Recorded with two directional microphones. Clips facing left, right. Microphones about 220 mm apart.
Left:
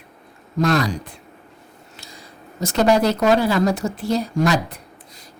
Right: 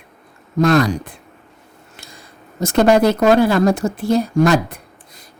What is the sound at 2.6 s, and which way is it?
Speech, 50° right (ahead or behind).